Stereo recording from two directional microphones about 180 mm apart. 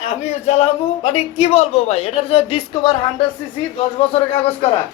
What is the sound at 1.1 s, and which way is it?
A woman's voice, 35° left (ahead or behind).